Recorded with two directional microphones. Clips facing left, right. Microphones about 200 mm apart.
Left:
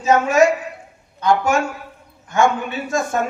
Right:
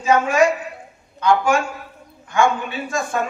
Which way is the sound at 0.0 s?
40° left (ahead or behind).